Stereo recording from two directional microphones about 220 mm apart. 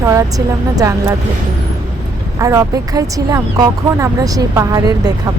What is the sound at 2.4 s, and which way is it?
Speech, 15° right (ahead or behind).